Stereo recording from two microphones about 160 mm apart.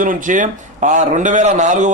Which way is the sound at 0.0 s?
55° right (ahead or behind).